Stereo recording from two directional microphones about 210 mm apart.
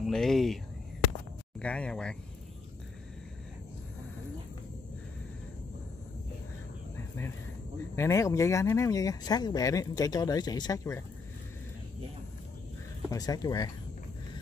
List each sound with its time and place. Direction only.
0.0 s speech: centre (ahead or behind)
1.6 s speech: 5° left (ahead or behind)
7.9 s speech: 15° left (ahead or behind)
13.1 s speech: 15° left (ahead or behind)